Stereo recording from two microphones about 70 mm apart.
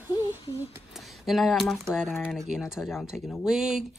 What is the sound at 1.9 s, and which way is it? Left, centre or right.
Speech, centre.